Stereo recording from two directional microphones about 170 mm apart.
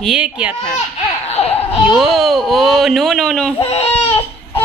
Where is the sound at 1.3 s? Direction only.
35° left (ahead or behind).